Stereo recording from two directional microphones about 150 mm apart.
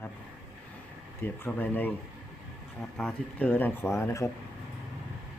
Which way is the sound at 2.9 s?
10° left (ahead or behind).